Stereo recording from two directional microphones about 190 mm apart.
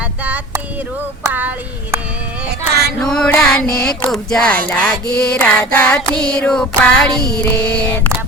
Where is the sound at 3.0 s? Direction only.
5° left (ahead or behind).